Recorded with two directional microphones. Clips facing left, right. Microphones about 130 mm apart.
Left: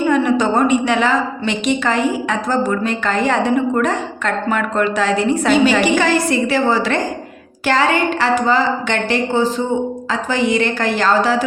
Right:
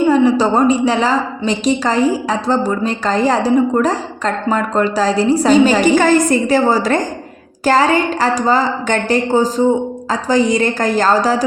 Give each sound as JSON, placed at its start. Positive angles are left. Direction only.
{"t": 0.1, "sound": "a woman's voice", "side_deg": -30}